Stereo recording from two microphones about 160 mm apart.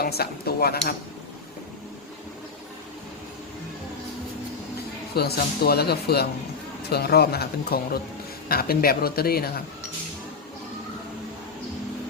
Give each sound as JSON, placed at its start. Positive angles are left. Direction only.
{"t": 0.0, "sound": "speech", "side_deg": 75}
{"t": 5.1, "sound": "speech", "side_deg": 85}